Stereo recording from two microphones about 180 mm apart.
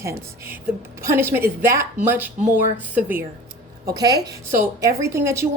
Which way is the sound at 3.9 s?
20° right (ahead or behind).